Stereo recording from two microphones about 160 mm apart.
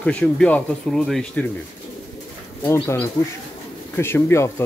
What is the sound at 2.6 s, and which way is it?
Speech, 15° left (ahead or behind).